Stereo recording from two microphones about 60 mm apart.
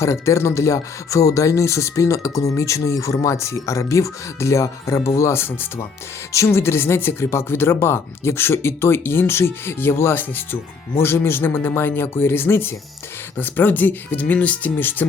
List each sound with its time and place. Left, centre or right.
0.0 s speech: left
6.3 s speech: left